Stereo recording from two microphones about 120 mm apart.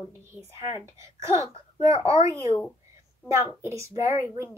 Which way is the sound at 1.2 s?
25° right (ahead or behind).